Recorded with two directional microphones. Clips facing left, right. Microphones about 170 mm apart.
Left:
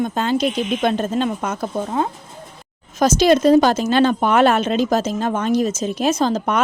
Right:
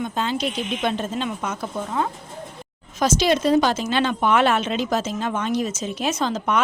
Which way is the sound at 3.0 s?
45° left (ahead or behind).